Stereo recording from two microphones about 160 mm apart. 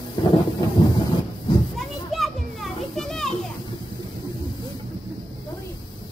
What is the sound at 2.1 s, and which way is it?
Children playing, centre (ahead or behind).